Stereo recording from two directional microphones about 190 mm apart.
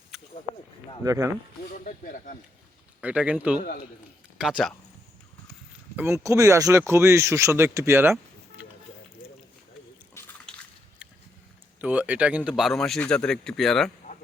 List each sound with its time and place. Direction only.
1.0 s speech: 15° right (ahead or behind)
1.7 s speech: 45° left (ahead or behind)
3.0 s speech: 5° right (ahead or behind)
6.0 s speech: 10° right (ahead or behind)
10.2 s drip: 10° left (ahead or behind)
11.8 s speech: 5° right (ahead or behind)